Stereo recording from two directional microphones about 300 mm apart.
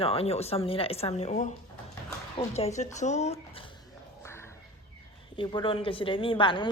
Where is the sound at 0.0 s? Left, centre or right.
Centre.